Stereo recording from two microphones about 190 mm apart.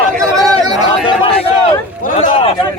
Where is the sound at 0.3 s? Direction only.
20° right (ahead or behind).